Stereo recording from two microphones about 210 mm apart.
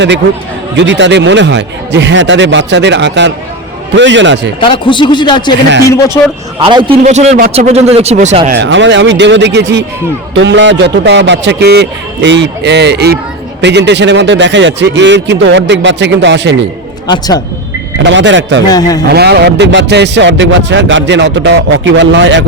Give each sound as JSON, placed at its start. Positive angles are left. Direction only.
{"t": 0.8, "sound": "speech", "side_deg": -60}
{"t": 4.6, "sound": "a man's voice", "side_deg": 25}
{"t": 6.6, "sound": "a man's voice", "side_deg": -25}
{"t": 8.5, "sound": "speech", "side_deg": -60}
{"t": 17.1, "sound": "a man's voice", "side_deg": 20}
{"t": 18.0, "sound": "speech", "side_deg": -60}
{"t": 18.7, "sound": "a man's voice", "side_deg": 20}
{"t": 19.1, "sound": "speech", "side_deg": -50}